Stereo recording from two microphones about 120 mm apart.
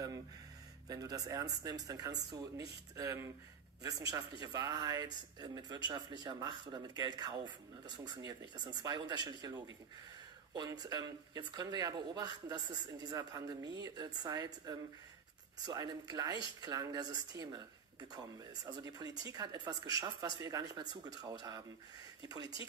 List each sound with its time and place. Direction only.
0.8 s speech: 30° right (ahead or behind)